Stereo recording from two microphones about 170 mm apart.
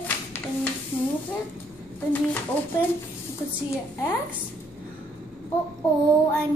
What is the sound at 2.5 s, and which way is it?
Speech, 10° left (ahead or behind).